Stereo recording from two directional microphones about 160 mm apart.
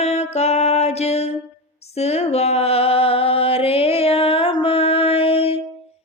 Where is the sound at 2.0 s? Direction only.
40° left (ahead or behind).